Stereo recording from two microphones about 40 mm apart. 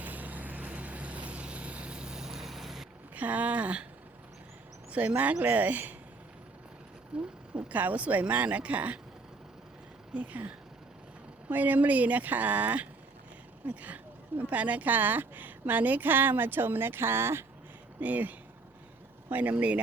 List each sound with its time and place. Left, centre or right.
0.0 s vehicle: right; by 2.8 s centre
3.2 s speech: right
4.9 s speech: right
7.1 s speech: right
7.5 s speech: right
10.2 s speech: right
18.0 s speech: right